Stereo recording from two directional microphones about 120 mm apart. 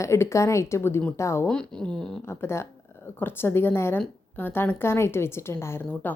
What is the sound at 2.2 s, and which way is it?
A woman's voice, 20° left (ahead or behind).